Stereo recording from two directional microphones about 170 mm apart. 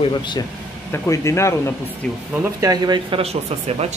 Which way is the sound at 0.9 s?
15° left (ahead or behind).